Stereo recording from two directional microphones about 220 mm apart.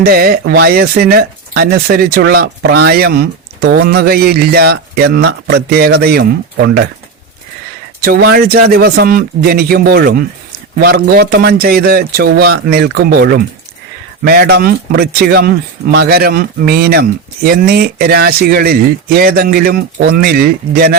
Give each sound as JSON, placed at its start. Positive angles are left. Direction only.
{"t": 0.0, "sound": "speech", "side_deg": -45}
{"t": 8.0, "sound": "speech", "side_deg": -45}